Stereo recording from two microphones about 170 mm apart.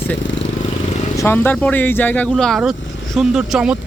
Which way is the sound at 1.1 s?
15° left (ahead or behind).